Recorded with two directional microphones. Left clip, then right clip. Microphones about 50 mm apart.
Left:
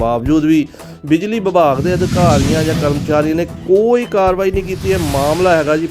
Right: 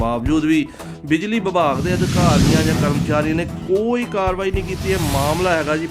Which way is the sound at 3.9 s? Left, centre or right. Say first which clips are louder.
Left 7 dB; left.